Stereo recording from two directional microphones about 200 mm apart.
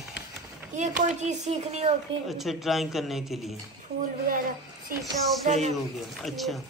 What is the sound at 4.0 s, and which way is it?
Speech, 45° right (ahead or behind).